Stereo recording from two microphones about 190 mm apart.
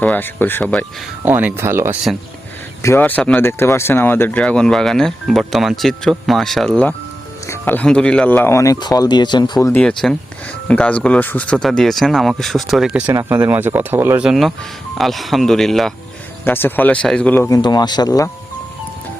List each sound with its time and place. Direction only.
0.0 s speech: 10° left (ahead or behind)
1.2 s speech: 10° right (ahead or behind)
2.8 s speech: 10° left (ahead or behind)
17.5 s speech: 20° left (ahead or behind)